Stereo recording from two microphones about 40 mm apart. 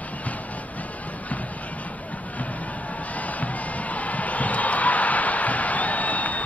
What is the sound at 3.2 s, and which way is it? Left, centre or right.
Music, left.